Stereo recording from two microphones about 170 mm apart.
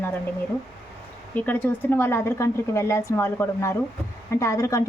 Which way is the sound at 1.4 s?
10° left (ahead or behind).